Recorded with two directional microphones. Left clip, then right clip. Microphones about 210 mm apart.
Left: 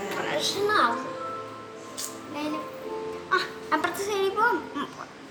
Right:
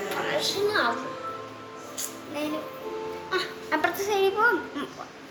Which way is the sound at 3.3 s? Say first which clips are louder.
Left 3 dB; 20° left (ahead or behind).